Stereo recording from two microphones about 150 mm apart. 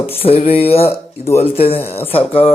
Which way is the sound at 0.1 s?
40° left (ahead or behind).